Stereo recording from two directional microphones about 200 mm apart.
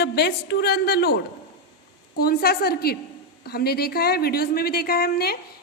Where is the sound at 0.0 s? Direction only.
55° left (ahead or behind).